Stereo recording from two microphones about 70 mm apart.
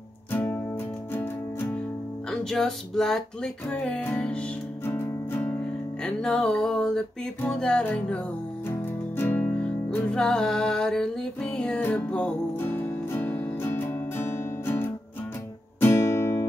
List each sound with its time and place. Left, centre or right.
0.3 s music: left
2.5 s music: centre
4.8 s music: left
6.2 s music: centre
8.6 s music: left
10.1 s music: centre
12.5 s music: left